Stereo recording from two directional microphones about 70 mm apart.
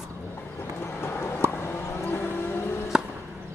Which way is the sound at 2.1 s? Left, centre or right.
Left.